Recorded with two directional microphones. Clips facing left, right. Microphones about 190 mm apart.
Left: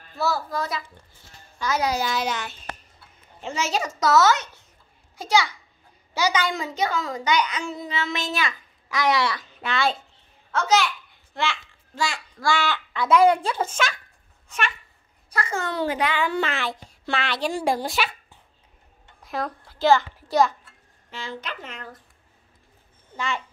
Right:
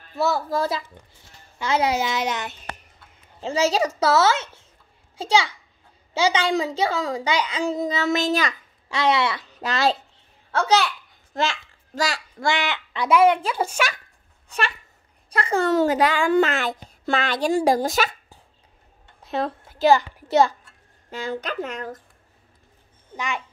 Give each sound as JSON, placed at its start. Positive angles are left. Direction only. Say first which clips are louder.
{"t": 0.1, "sound": "a child's voice", "louder": "right 3 dB", "side_deg": -25}
{"t": 3.3, "sound": "a woman's voice", "louder": "right 6 dB", "side_deg": -35}
{"t": 8.8, "sound": "speech", "louder": "right 1 dB", "side_deg": -25}
{"t": 9.5, "sound": "a child's voice", "louder": "right 3 dB", "side_deg": -40}
{"t": 11.3, "sound": "a child's voice", "louder": "right 3 dB", "side_deg": -45}
{"t": 12.4, "sound": "a child's voice", "louder": "left 1 dB", "side_deg": -20}
{"t": 14.5, "sound": "a woman's voice", "louder": "right 2 dB", "side_deg": -35}
{"t": 19.2, "sound": "a sound", "louder": "right 4 dB", "side_deg": -25}
{"t": 21.1, "sound": "a woman's voice", "louder": "right 6 dB", "side_deg": -40}
{"t": 23.1, "sound": "a child's voice", "louder": "even", "side_deg": -15}